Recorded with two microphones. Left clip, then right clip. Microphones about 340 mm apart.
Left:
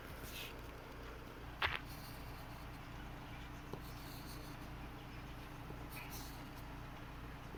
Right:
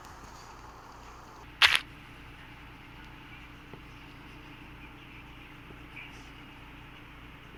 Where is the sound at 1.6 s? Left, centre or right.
Right.